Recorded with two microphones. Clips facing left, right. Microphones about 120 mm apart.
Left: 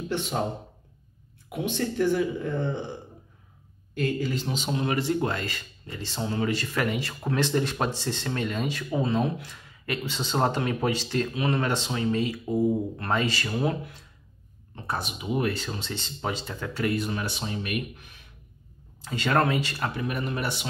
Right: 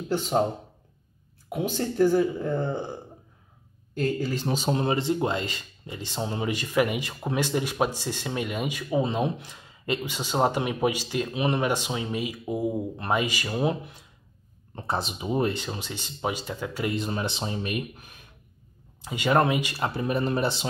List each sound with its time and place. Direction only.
0.1 s speech: 30° right (ahead or behind)
1.5 s speech: 35° right (ahead or behind)
4.0 s speech: 40° right (ahead or behind)
4.9 s speech: 20° right (ahead or behind)
15.5 s speech: 15° right (ahead or behind)
16.9 s speech: 25° right (ahead or behind)
17.9 s speech: 40° right (ahead or behind)
18.9 s speech: 15° right (ahead or behind)
19.9 s speech: 30° right (ahead or behind)